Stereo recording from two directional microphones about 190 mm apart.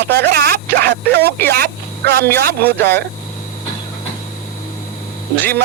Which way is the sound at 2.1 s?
55° right (ahead or behind).